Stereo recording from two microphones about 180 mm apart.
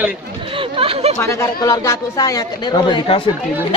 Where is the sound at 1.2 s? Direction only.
15° left (ahead or behind).